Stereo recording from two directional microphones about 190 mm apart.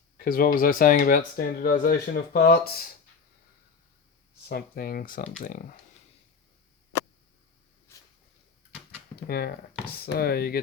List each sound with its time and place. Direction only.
0.3 s speech: 45° left (ahead or behind)
4.4 s speech: 55° left (ahead or behind)
7.9 s a sound: 15° left (ahead or behind)
9.1 s speech: 55° left (ahead or behind)